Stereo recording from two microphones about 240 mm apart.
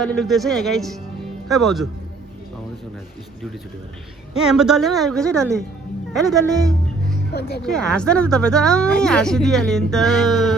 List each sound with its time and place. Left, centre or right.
0.0 s speech: centre
4.4 s speech: centre
7.3 s speech: left
7.6 s speech: centre